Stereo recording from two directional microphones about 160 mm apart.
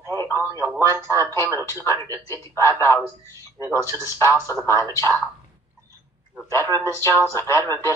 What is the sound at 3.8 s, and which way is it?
Speech, 20° right (ahead or behind).